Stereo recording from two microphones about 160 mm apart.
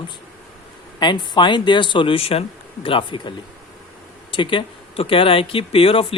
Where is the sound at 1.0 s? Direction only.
30° left (ahead or behind).